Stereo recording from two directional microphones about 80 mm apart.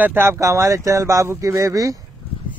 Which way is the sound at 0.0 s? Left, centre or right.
Right.